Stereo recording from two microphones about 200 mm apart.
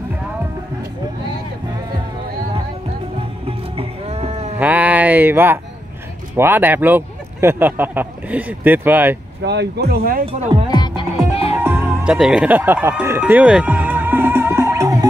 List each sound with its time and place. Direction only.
3.4 s music: 30° right (ahead or behind)
4.6 s speech: 10° right (ahead or behind)
9.4 s speech: 60° right (ahead or behind)
10.2 s speech: 30° right (ahead or behind)
10.7 s music: 20° left (ahead or behind)
11.6 s music: 10° right (ahead or behind)